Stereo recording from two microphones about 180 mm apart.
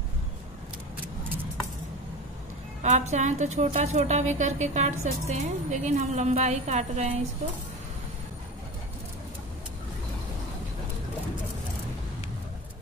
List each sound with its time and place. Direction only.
2.8 s a woman's voice: 40° right (ahead or behind)